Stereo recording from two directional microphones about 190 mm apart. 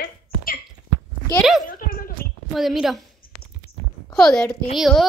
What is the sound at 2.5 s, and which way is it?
Speech, centre (ahead or behind).